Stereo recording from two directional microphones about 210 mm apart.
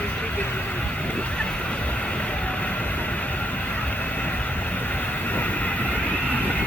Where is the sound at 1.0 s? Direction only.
5° left (ahead or behind).